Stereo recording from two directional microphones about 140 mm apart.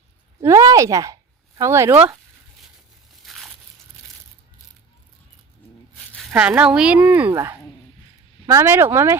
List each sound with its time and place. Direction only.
0.4 s speech: 25° right (ahead or behind)
3.2 s a sound: centre (ahead or behind)
6.3 s speech: 10° right (ahead or behind)